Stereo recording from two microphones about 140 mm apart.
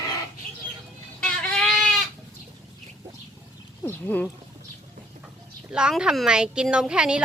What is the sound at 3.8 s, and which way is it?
Speech, 15° left (ahead or behind).